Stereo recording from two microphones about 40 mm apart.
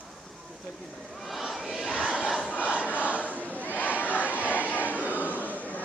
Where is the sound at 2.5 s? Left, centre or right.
Left.